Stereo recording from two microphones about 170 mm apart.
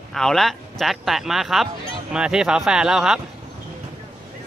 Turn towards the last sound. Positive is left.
turn(degrees=-5)  # may be behind; listen again after turning